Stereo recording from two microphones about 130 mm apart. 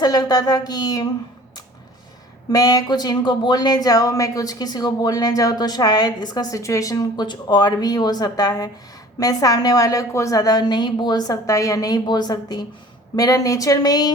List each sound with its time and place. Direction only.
0.0 s speech: 30° left (ahead or behind)
2.5 s a woman's voice: 30° left (ahead or behind)